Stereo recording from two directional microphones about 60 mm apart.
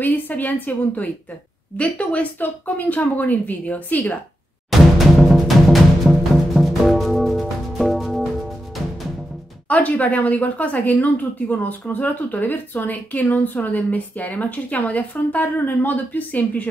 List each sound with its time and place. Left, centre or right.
0.0 s a woman's voice: left
4.6 s music: centre
9.7 s a woman's voice: left